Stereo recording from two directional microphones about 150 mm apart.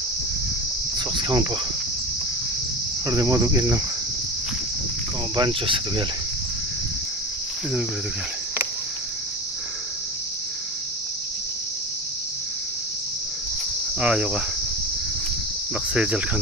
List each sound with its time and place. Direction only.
0.9 s cricket: 30° right (ahead or behind)
3.1 s speech: 25° right (ahead or behind)
5.3 s cricket: 30° right (ahead or behind)
13.9 s speech: 5° right (ahead or behind)
15.9 s cricket: 5° right (ahead or behind)